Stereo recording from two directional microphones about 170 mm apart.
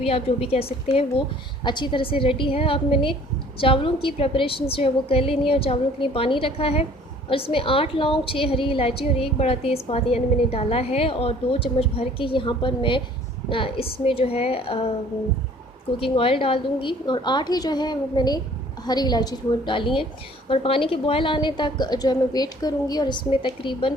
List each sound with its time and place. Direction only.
0.0 s a woman's voice: 35° left (ahead or behind)
16.0 s a woman's voice: 35° left (ahead or behind)